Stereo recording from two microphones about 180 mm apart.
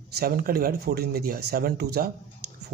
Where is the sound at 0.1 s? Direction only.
55° right (ahead or behind).